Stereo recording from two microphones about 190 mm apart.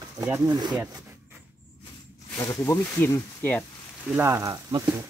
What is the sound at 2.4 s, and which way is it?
Speech, 15° left (ahead or behind).